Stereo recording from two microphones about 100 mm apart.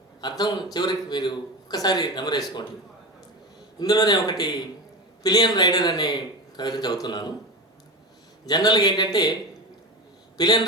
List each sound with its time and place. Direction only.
0.2 s speech: 45° left (ahead or behind)
3.8 s speech: 45° left (ahead or behind)
8.4 s speech: 45° left (ahead or behind)
10.3 s a man's voice: 40° left (ahead or behind)